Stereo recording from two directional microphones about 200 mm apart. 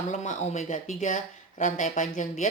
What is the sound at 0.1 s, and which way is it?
Speech, 35° left (ahead or behind).